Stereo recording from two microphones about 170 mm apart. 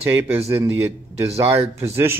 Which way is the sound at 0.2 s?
15° right (ahead or behind).